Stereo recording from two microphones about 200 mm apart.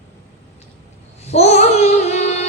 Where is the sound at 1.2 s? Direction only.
30° left (ahead or behind).